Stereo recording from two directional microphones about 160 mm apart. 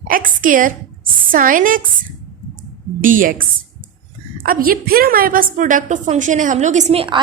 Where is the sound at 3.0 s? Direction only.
60° right (ahead or behind); by 7.2 s 35° right (ahead or behind).